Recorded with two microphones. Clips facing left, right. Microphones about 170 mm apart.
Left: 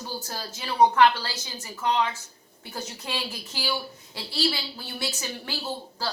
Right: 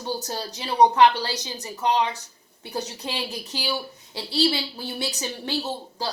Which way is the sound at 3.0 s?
20° right (ahead or behind).